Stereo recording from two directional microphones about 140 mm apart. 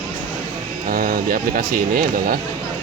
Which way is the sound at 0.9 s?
90° right.